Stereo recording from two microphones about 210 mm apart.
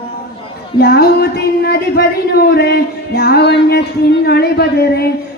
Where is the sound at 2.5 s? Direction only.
50° left (ahead or behind).